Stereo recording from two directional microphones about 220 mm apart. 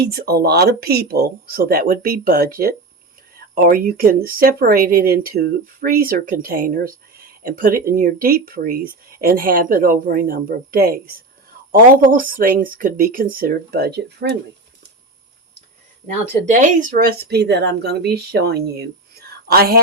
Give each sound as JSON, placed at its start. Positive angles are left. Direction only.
{"t": 0.0, "sound": "speech", "side_deg": -45}
{"t": 16.5, "sound": "speech", "side_deg": -35}
{"t": 19.3, "sound": "a sound", "side_deg": -45}